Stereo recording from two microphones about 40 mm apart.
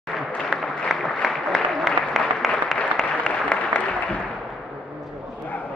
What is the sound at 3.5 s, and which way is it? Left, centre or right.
Applause, left.